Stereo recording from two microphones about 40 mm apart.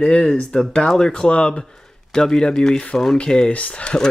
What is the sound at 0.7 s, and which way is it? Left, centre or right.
Speech, centre.